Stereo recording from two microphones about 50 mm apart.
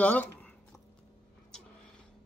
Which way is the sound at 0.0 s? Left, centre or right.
Left.